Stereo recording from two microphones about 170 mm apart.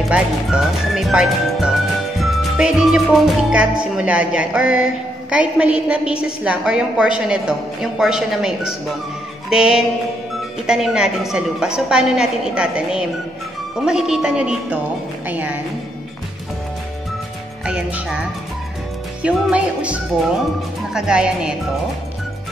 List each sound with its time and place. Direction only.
0.1 s a woman's voice: 5° right (ahead or behind)
17.6 s speech: 5° right (ahead or behind)
19.2 s a woman's voice: 5° right (ahead or behind)